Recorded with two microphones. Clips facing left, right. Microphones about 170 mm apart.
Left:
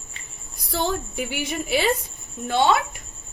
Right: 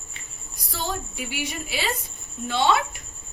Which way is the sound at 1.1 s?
55° left (ahead or behind).